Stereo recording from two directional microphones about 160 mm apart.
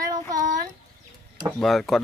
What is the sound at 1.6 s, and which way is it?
Speech, centre (ahead or behind).